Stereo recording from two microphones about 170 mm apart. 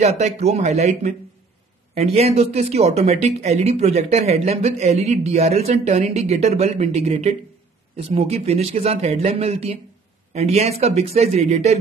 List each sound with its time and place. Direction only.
0.0 s speech: 40° right (ahead or behind)